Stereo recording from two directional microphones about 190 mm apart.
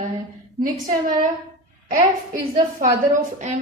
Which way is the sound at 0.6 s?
45° right (ahead or behind).